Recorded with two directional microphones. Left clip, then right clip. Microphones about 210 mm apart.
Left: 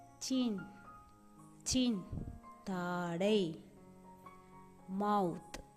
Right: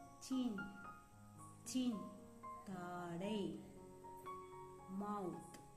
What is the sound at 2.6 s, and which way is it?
Music, 45° left (ahead or behind).